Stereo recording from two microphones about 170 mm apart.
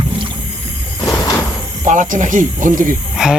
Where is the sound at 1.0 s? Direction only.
20° left (ahead or behind).